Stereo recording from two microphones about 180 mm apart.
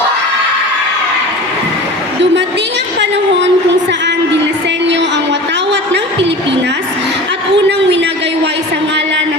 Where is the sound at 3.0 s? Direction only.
80° right.